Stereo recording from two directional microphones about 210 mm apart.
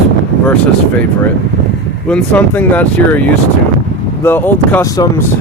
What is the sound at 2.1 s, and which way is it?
Speech, 10° left (ahead or behind).